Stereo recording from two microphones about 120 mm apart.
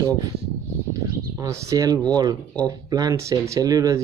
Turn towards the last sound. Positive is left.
turn(degrees=-30)  # may be behind; listen again after turning